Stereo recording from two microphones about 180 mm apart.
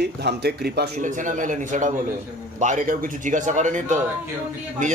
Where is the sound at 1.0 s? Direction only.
45° right (ahead or behind).